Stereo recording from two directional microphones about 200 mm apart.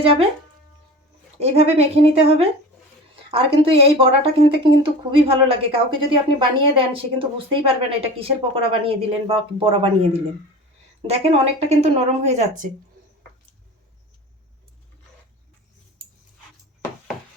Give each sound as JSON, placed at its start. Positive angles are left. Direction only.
{"t": 1.4, "sound": "a woman's voice", "side_deg": -30}